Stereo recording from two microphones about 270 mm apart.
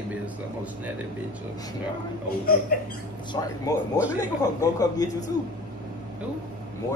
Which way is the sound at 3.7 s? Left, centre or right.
Centre.